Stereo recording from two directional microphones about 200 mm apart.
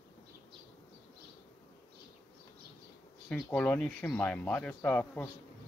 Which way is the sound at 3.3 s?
5° left (ahead or behind).